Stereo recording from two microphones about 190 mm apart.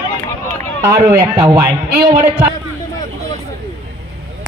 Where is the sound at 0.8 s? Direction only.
15° right (ahead or behind).